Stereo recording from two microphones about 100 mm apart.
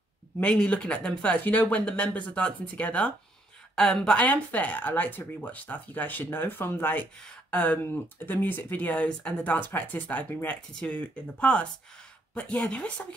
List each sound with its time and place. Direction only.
0.4 s speech: 10° left (ahead or behind)